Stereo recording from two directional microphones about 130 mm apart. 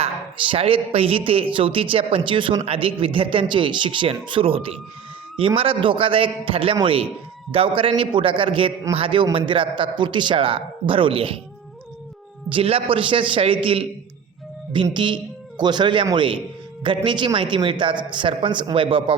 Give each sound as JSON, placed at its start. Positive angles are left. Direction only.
{"t": 0.0, "sound": "a woman's voice", "side_deg": -40}
{"t": 12.5, "sound": "a woman's voice", "side_deg": -45}
{"t": 14.9, "sound": "a man's voice", "side_deg": -35}